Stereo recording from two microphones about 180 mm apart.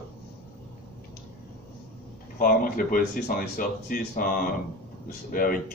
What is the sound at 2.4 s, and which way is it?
Speech, 50° left (ahead or behind).